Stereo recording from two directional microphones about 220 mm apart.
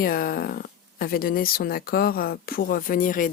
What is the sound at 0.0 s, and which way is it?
Speech, 40° left (ahead or behind).